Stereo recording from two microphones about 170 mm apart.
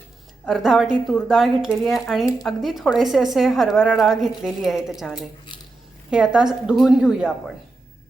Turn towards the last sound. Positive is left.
turn(degrees=-5)  # may be behind; listen again after turning